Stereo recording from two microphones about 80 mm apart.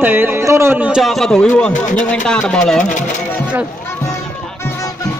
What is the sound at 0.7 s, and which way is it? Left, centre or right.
Speech, centre.